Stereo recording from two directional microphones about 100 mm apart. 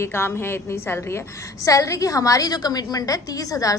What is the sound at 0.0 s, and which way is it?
A woman's voice, 25° left (ahead or behind).